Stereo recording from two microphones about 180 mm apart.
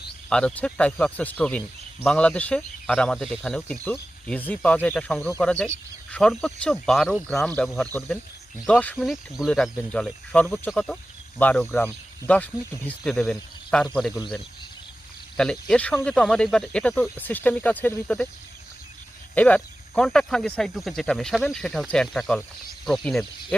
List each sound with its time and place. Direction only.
0.3 s speech: 5° left (ahead or behind)
15.4 s speech: 5° left (ahead or behind)
19.3 s speech: 10° left (ahead or behind)